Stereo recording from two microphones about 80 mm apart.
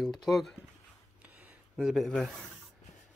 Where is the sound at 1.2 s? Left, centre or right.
Centre.